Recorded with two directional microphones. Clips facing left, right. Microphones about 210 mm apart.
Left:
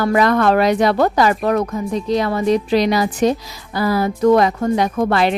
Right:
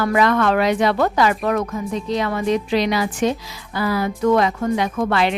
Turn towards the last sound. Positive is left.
turn(degrees=40)  # may be behind; listen again after turning